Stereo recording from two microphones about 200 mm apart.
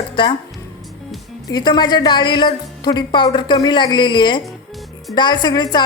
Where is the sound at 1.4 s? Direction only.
20° left (ahead or behind).